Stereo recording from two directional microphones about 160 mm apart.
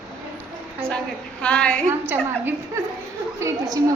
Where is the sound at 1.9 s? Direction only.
10° right (ahead or behind).